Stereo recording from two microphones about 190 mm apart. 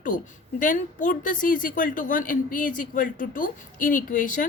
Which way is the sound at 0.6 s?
45° left (ahead or behind).